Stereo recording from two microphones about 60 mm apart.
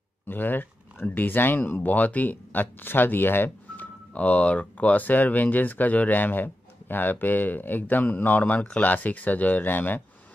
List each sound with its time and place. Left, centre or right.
0.3 s speech: left